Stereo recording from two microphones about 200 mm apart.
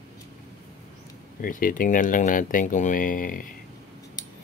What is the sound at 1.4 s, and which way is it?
Speech, 45° left (ahead or behind).